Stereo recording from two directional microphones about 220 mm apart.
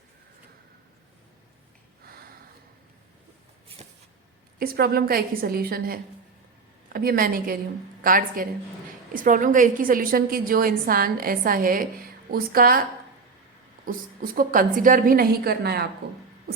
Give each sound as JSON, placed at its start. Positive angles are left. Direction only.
{"t": 4.6, "sound": "a woman's voice", "side_deg": -45}
{"t": 13.8, "sound": "a woman's voice", "side_deg": -40}